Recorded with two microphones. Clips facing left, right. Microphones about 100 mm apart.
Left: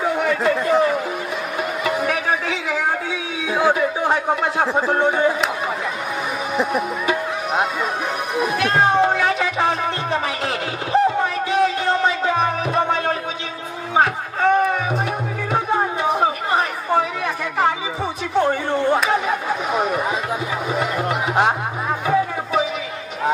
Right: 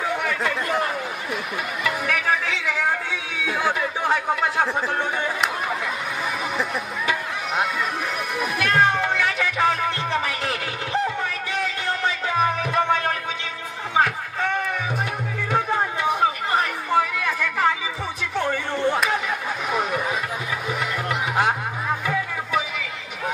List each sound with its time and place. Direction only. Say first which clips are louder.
0.0 s chatter: left 5 dB; 30° left (ahead or behind)
1.9 s music: left 2 dB; 30° left (ahead or behind)
6.5 s music: left 6 dB; 20° left (ahead or behind)
13.9 s a sound: left 3 dB; 30° left (ahead or behind)
15.5 s music: left 3 dB; 25° left (ahead or behind)
16.9 s chatter: left 2 dB; 25° left (ahead or behind)
18.3 s a sound: left 7 dB; 30° left (ahead or behind)
19.0 s chatter: left 5 dB; 30° left (ahead or behind)
20.7 s music: left 5 dB; 25° left (ahead or behind)